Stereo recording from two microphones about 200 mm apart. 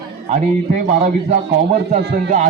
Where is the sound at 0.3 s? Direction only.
35° right (ahead or behind).